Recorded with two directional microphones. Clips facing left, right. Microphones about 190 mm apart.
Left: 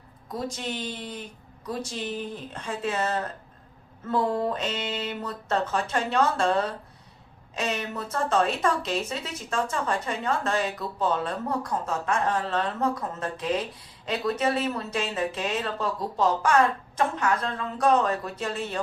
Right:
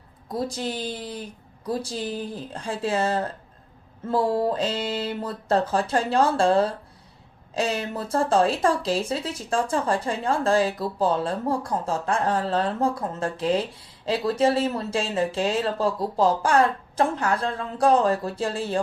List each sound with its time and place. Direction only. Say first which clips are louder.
0.3 s speech: right 4 dB; 35° right (ahead or behind)